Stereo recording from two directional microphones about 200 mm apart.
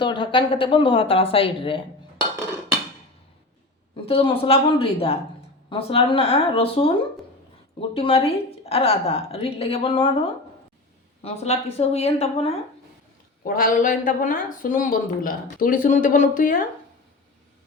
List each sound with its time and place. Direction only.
0.0 s a woman's voice: 25° left (ahead or behind)
4.0 s a woman's voice: 25° left (ahead or behind)
11.2 s speech: 30° left (ahead or behind)
13.4 s speech: 45° left (ahead or behind)